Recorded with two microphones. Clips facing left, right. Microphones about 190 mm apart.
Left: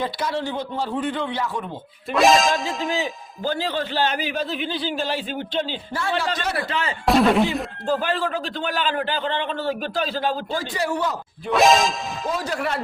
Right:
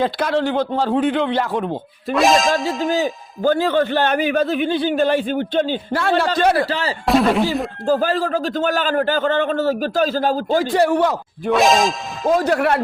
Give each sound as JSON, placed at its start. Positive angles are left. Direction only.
{"t": 0.0, "sound": "speech", "side_deg": -80}
{"t": 2.1, "sound": "speech", "side_deg": 0}
{"t": 2.9, "sound": "a man's voice", "side_deg": -45}
{"t": 6.6, "sound": "speech", "side_deg": -35}
{"t": 7.0, "sound": "speech", "side_deg": 0}
{"t": 7.9, "sound": "a man's voice", "side_deg": -40}
{"t": 11.5, "sound": "speech", "side_deg": 0}
{"t": 12.3, "sound": "speech", "side_deg": -60}